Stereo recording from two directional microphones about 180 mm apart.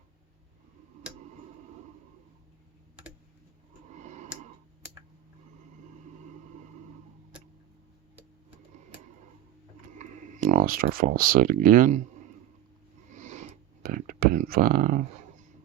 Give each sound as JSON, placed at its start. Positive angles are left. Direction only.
{"t": 3.9, "sound": "tick-tock", "side_deg": -40}
{"t": 9.9, "sound": "speech", "side_deg": -45}
{"t": 13.1, "sound": "a sound", "side_deg": -40}